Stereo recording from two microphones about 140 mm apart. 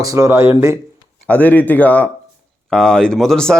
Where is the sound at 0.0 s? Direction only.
25° right (ahead or behind).